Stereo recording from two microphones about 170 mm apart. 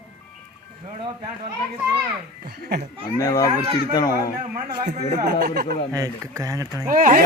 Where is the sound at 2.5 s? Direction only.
65° right (ahead or behind).